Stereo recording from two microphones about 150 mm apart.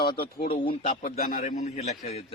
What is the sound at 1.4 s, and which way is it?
Speech, 50° left (ahead or behind).